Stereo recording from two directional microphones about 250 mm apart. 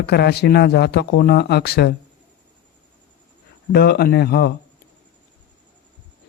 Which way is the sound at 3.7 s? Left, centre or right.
Left.